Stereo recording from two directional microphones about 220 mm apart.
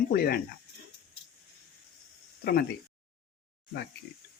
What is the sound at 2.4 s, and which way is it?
Speech, 45° left (ahead or behind).